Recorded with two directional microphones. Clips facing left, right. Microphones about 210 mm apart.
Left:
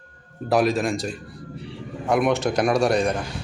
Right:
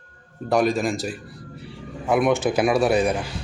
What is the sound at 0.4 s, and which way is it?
A man's voice, centre (ahead or behind).